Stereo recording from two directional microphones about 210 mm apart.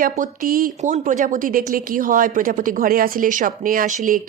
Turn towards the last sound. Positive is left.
turn(degrees=-40)  # may be behind; listen again after turning